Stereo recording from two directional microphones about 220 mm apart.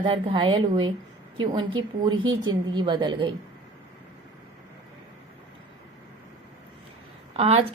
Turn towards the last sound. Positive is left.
turn(degrees=-25)  # may be behind; listen again after turning